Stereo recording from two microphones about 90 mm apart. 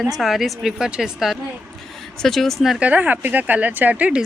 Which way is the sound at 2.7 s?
15° right (ahead or behind).